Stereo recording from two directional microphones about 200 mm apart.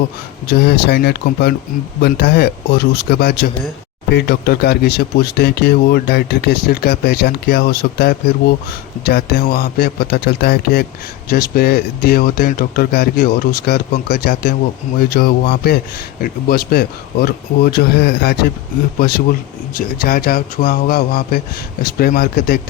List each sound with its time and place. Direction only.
0.4 s speech: 55° left (ahead or behind)